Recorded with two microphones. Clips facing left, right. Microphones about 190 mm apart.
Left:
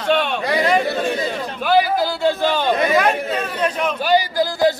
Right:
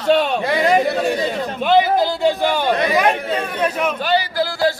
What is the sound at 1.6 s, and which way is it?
A man's voice, 20° right (ahead or behind).